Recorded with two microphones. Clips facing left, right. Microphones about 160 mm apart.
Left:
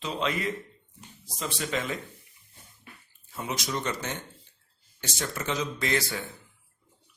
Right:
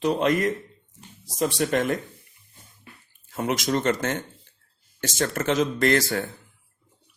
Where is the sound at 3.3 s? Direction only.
80° right.